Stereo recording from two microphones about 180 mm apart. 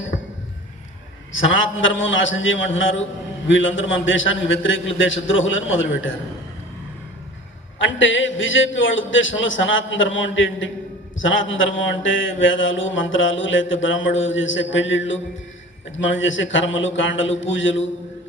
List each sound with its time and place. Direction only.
1.3 s mantra: 90° left
7.8 s mantra: 90° left